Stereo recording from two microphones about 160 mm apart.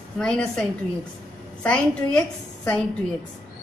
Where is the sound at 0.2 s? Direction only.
5° left (ahead or behind).